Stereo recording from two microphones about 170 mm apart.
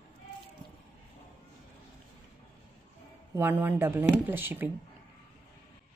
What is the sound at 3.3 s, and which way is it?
A woman's voice, 15° right (ahead or behind).